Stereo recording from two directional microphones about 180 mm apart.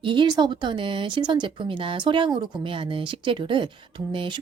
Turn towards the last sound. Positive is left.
turn(degrees=-25)  # may be behind; listen again after turning